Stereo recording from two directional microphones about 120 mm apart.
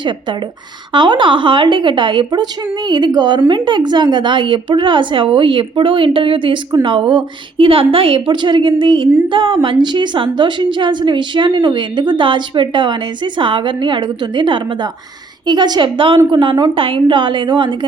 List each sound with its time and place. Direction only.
0.9 s a woman's voice: 40° right (ahead or behind)